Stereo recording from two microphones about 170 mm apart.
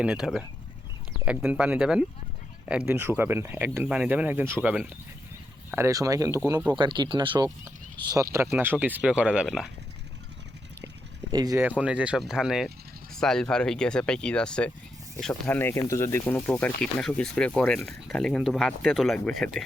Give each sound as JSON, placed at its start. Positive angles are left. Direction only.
{"t": 0.0, "sound": "speech", "side_deg": -5}
{"t": 11.3, "sound": "speech", "side_deg": -20}
{"t": 11.8, "sound": "speech", "side_deg": -5}